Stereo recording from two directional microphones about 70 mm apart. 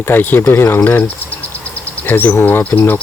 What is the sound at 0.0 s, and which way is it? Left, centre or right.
Speech, left.